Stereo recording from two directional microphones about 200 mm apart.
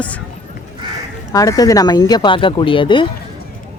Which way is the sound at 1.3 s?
15° left (ahead or behind).